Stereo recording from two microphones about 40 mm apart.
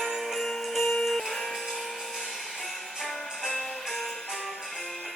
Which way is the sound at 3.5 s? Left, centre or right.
Centre.